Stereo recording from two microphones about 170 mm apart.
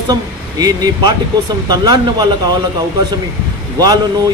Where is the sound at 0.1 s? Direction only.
25° right (ahead or behind).